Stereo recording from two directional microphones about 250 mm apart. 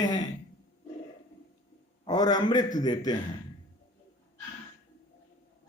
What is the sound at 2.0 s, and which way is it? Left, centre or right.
A man's voice, centre.